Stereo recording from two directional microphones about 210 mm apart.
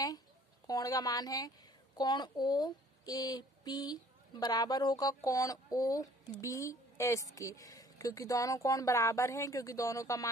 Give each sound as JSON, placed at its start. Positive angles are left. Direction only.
{"t": 0.7, "sound": "speech", "side_deg": 15}